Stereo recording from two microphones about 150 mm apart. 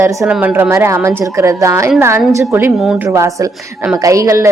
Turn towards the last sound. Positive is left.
turn(degrees=-20)  # may be behind; listen again after turning